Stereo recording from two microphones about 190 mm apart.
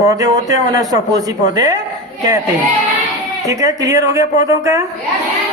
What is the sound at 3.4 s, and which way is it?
A man's voice, 20° right (ahead or behind).